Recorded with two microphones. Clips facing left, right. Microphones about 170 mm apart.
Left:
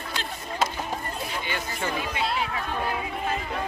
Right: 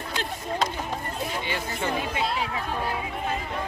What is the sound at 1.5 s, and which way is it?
Speech, 30° right (ahead or behind).